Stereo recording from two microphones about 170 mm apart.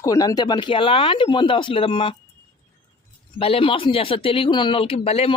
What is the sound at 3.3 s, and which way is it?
Speech, 35° left (ahead or behind).